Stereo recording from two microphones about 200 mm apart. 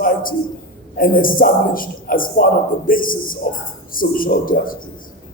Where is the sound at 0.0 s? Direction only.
45° left (ahead or behind).